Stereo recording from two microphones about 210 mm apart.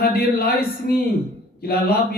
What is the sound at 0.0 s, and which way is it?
A man's voice, 45° left (ahead or behind).